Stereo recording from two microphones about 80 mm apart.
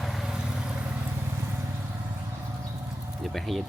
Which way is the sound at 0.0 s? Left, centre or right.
Centre.